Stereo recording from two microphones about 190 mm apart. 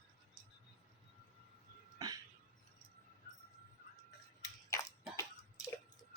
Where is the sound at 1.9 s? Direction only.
20° right (ahead or behind).